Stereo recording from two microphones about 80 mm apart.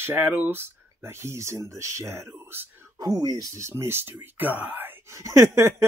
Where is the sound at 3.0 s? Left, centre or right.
Right.